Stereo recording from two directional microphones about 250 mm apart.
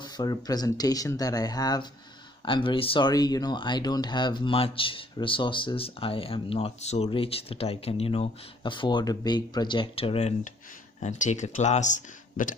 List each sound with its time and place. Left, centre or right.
0.0 s speech: centre; by 12.5 s left